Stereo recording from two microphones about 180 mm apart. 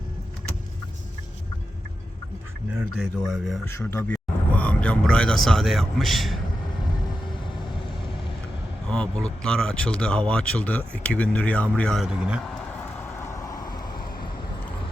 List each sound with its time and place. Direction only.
2.9 s speech: centre (ahead or behind)
3.7 s speech: 15° left (ahead or behind)
8.9 s speech: 5° left (ahead or behind)
13.0 s vehicle: 15° left (ahead or behind)